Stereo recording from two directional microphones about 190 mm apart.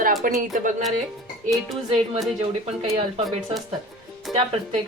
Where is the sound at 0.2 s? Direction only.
45° right (ahead or behind).